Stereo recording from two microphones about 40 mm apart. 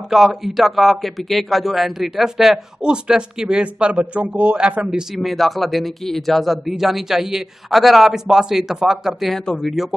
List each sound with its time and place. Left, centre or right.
0.1 s speech: centre
2.8 s a man's voice: right
4.6 s speech: right
5.1 s speech: centre